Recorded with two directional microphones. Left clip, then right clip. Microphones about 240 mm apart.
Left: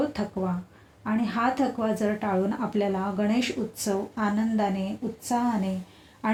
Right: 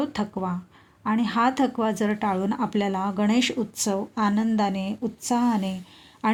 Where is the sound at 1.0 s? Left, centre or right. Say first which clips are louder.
Right 3 dB; right.